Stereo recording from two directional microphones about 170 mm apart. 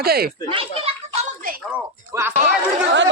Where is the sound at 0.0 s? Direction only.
65° right (ahead or behind).